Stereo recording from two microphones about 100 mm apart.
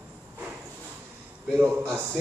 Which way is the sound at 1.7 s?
20° right (ahead or behind).